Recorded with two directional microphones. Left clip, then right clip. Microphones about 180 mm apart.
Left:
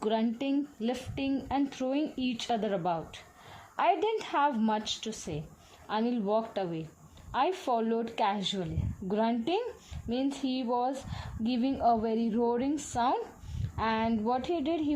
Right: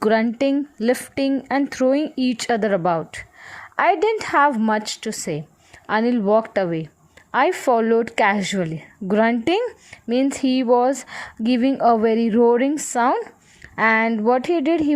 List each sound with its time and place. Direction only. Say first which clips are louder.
0.0 s speech: right 13 dB; 40° right (ahead or behind)